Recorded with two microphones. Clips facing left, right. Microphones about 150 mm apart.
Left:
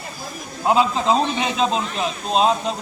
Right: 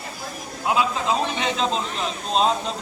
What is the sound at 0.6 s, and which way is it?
Speech, 30° left (ahead or behind).